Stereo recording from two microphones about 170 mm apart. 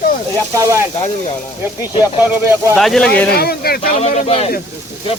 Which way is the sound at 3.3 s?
65° left (ahead or behind).